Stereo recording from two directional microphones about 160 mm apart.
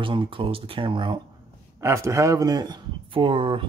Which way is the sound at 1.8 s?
20° right (ahead or behind).